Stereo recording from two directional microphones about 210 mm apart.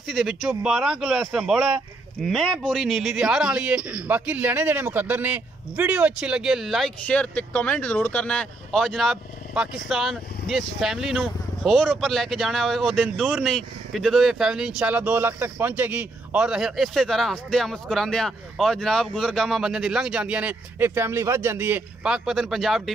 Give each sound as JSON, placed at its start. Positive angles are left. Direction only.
{"t": 0.0, "sound": "a man's voice", "side_deg": 0}